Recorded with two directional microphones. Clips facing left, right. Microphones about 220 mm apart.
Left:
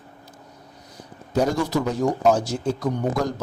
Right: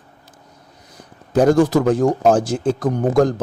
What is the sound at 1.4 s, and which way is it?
Speech, 50° right (ahead or behind).